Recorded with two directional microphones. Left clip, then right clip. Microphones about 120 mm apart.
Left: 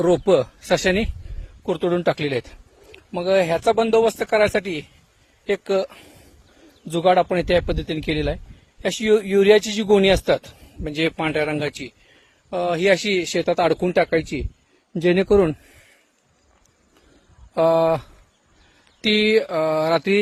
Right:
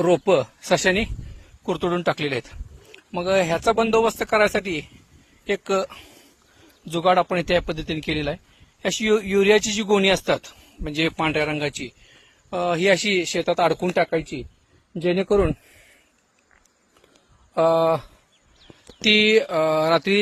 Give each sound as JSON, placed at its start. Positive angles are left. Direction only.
{"t": 0.3, "sound": "speech", "side_deg": 45}
{"t": 13.8, "sound": "speech", "side_deg": 65}
{"t": 15.0, "sound": "speech", "side_deg": 80}
{"t": 17.5, "sound": "mantra", "side_deg": 30}